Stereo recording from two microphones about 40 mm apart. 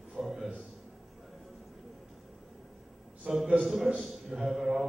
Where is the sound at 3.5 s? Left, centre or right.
Centre.